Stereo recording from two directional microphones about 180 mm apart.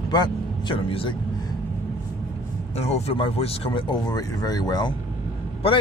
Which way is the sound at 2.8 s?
35° left (ahead or behind).